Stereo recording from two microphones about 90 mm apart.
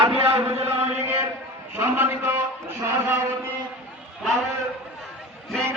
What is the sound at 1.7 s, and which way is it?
A man's voice, 25° right (ahead or behind).